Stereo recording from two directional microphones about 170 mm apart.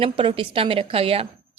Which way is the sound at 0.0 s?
35° right (ahead or behind).